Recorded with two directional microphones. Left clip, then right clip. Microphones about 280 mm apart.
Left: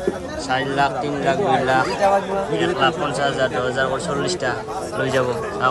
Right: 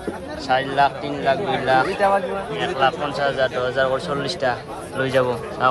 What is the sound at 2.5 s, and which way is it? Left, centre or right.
A man's voice, centre.